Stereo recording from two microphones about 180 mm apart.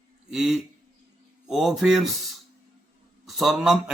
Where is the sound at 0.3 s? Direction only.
Centre (ahead or behind).